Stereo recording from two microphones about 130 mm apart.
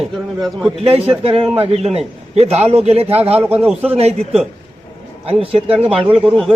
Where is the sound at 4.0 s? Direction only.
55° right (ahead or behind).